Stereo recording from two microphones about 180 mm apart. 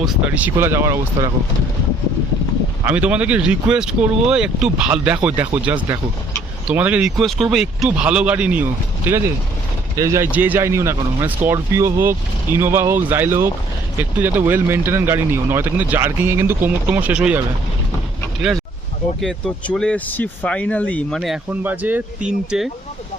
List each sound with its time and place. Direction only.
0.0 s speech: 10° right (ahead or behind)
2.8 s speech: 5° right (ahead or behind)
19.2 s speech: centre (ahead or behind)
21.2 s speech: 5° right (ahead or behind)